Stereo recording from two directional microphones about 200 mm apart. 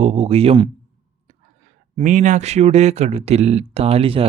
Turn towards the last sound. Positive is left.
turn(degrees=-30)  # may be behind; listen again after turning